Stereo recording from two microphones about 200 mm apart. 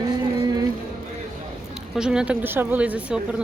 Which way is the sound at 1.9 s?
5° right (ahead or behind).